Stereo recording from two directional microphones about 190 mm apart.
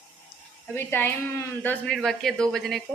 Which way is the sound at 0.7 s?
10° left (ahead or behind).